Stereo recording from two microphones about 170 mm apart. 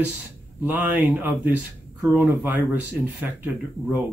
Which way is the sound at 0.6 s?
10° right (ahead or behind).